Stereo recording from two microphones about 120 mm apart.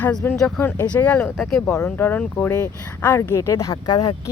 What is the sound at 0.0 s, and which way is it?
Speech, 10° left (ahead or behind).